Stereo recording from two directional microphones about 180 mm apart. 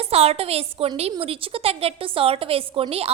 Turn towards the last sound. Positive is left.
turn(degrees=-35)  # may be behind; listen again after turning